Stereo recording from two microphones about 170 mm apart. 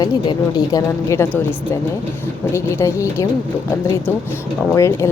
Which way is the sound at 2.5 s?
15° left (ahead or behind).